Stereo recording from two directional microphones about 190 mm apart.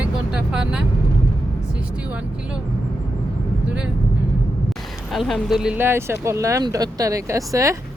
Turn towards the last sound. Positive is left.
turn(degrees=-15)  # may be behind; listen again after turning